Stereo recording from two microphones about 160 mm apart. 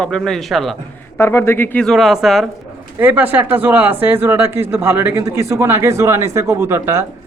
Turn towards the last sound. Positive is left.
turn(degrees=-15)  # may be behind; listen again after turning